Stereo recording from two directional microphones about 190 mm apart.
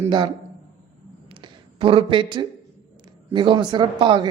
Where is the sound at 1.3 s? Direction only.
30° right (ahead or behind).